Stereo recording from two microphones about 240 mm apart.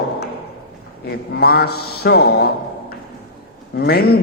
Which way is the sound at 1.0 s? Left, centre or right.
Left.